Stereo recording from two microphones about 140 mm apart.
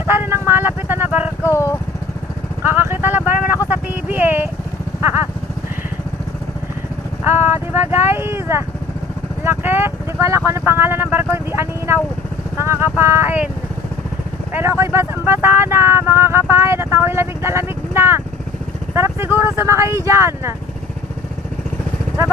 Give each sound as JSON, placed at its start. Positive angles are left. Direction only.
{"t": 0.0, "sound": "vehicle", "side_deg": -15}
{"t": 1.4, "sound": "vehicle", "side_deg": 20}
{"t": 2.6, "sound": "vehicle", "side_deg": -15}
{"t": 7.2, "sound": "speech", "side_deg": -15}
{"t": 14.5, "sound": "speech", "side_deg": -15}